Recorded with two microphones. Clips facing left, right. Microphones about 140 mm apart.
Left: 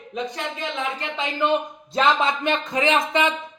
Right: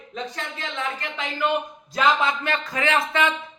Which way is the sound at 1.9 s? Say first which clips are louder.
Left 1 dB; 20° left (ahead or behind).